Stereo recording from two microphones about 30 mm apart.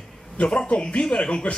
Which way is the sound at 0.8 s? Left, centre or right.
Left.